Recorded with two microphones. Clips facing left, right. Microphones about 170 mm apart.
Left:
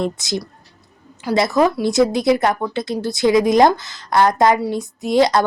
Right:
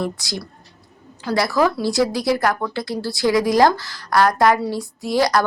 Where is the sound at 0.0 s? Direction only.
20° left (ahead or behind).